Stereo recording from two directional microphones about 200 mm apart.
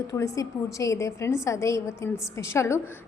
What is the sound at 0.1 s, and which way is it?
A woman's voice, 15° left (ahead or behind).